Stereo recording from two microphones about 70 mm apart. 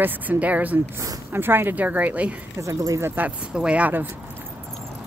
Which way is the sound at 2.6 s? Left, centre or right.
Right.